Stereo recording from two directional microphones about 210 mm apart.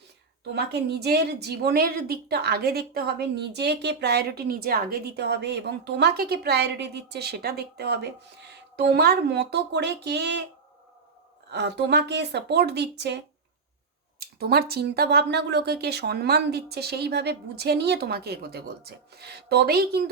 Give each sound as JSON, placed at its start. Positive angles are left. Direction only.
{"t": 0.5, "sound": "a woman's voice", "side_deg": -50}
{"t": 11.5, "sound": "a woman's voice", "side_deg": -50}
{"t": 14.2, "sound": "a woman's voice", "side_deg": -50}